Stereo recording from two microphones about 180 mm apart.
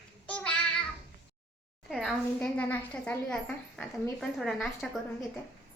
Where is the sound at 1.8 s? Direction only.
Centre (ahead or behind).